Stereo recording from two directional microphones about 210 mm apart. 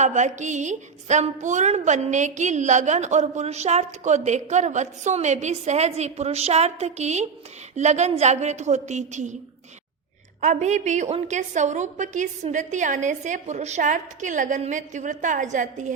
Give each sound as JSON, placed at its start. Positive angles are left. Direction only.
{"t": 0.0, "sound": "a woman's voice", "side_deg": -35}
{"t": 10.4, "sound": "a woman's voice", "side_deg": -35}